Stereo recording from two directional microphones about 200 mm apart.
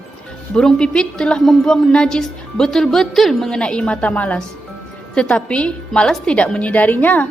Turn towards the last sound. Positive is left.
turn(degrees=10)  # may be behind; listen again after turning